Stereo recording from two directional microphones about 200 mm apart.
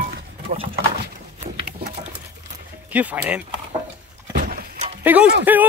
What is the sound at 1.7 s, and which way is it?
Pigeon, 50° right (ahead or behind).